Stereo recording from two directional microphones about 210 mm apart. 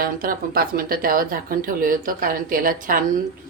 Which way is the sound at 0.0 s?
45° right (ahead or behind).